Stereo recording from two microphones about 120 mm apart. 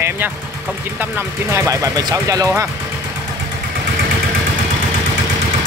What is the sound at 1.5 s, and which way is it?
Speech, 25° right (ahead or behind).